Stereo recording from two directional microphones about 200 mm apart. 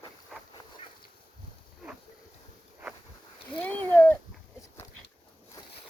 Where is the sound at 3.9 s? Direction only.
10° left (ahead or behind).